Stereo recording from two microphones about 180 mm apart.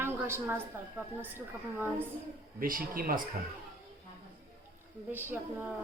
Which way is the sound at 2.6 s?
50° right (ahead or behind).